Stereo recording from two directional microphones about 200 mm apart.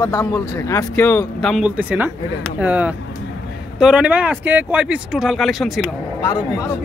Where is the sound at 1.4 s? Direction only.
Centre (ahead or behind).